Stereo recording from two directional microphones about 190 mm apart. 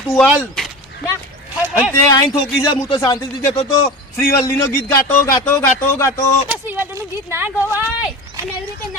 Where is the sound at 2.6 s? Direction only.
25° left (ahead or behind).